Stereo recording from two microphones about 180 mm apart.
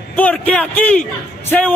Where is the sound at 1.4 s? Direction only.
10° left (ahead or behind).